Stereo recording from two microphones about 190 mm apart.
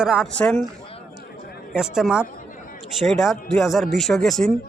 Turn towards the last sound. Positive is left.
turn(degrees=0)  # may be behind; listen again after turning